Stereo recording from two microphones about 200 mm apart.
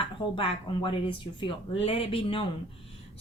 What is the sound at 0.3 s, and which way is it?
A woman's voice, 25° left (ahead or behind).